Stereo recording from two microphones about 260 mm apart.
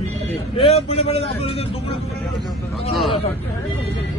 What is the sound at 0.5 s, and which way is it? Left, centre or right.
Speech, left.